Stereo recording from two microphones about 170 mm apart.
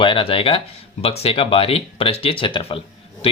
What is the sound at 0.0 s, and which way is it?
Speech, 30° left (ahead or behind).